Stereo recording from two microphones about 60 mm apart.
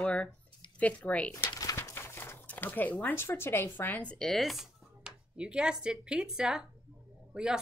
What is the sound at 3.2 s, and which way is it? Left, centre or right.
Speech, left.